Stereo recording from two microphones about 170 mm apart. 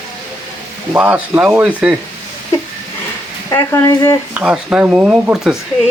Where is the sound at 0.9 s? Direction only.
10° right (ahead or behind).